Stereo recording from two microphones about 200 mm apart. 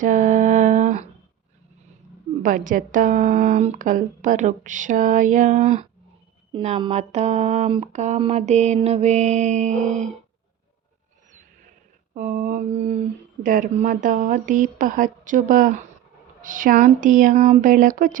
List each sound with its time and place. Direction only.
0.0 s a sound: 40° right (ahead or behind)
2.4 s speech: 40° right (ahead or behind)
12.1 s speech: 40° right (ahead or behind)